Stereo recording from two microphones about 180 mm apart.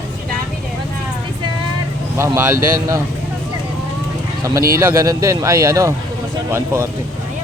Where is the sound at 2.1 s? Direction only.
15° right (ahead or behind).